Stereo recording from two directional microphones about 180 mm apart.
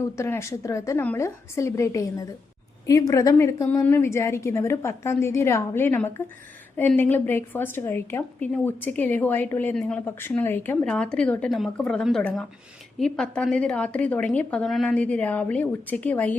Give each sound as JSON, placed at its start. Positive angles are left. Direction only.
{"t": 0.0, "sound": "a woman's voice", "side_deg": 15}